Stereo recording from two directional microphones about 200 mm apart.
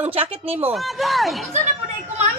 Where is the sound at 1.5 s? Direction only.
35° right (ahead or behind).